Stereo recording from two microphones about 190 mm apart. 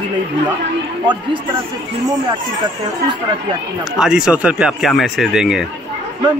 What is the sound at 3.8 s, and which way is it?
Speech, 5° right (ahead or behind).